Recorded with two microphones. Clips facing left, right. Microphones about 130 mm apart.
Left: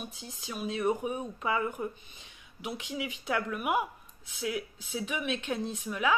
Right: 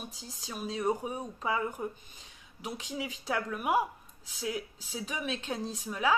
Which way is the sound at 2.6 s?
40° right (ahead or behind).